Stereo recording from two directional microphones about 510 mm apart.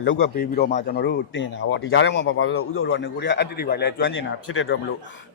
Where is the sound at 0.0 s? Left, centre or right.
Centre.